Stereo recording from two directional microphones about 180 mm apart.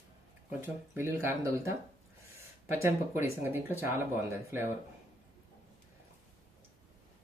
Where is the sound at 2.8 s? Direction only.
15° right (ahead or behind).